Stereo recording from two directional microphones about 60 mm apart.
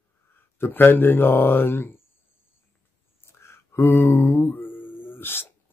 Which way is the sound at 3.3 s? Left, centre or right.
Left.